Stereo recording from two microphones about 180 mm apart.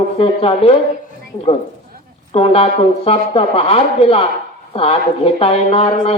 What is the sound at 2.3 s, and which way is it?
Speech, 30° left (ahead or behind).